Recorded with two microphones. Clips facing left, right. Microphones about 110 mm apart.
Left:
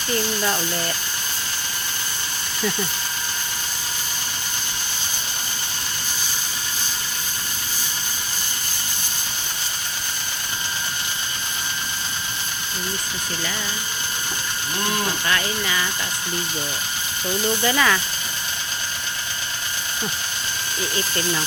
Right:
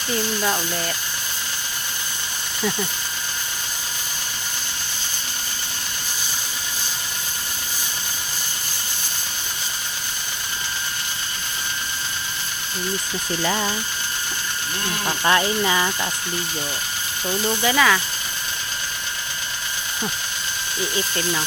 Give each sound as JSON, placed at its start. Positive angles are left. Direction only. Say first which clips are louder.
{"t": 0.1, "sound": "speech", "louder": "even", "side_deg": -5}
{"t": 15.2, "sound": "speech", "louder": "right 5 dB", "side_deg": -25}
{"t": 17.6, "sound": "speech", "louder": "right 3 dB", "side_deg": 0}